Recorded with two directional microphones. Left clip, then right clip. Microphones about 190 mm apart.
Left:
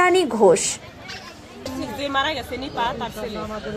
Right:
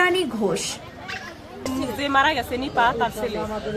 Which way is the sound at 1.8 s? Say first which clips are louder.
Right 3 dB; 15° right (ahead or behind).